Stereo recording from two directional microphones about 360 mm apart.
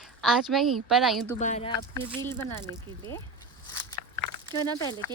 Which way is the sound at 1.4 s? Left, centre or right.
Centre.